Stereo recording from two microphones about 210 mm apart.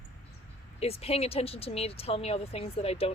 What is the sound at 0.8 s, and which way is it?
Speech, 30° left (ahead or behind).